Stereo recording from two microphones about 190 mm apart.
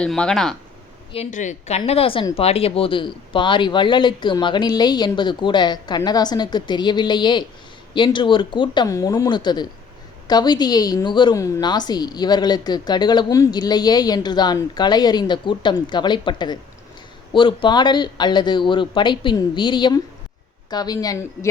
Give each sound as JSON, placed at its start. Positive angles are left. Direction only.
{"t": 0.0, "sound": "speech", "side_deg": 5}
{"t": 1.1, "sound": "a woman's voice", "side_deg": 35}